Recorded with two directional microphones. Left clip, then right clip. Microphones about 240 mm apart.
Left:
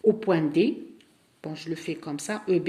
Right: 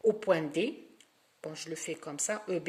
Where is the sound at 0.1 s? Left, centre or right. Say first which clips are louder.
Left 7 dB; right.